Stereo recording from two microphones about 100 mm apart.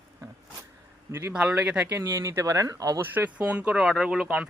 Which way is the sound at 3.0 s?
20° right (ahead or behind).